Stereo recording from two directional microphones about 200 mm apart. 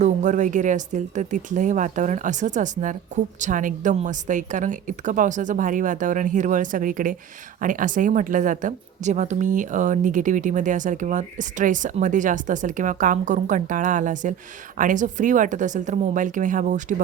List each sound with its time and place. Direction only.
0.0 s a woman's voice: 35° right (ahead or behind)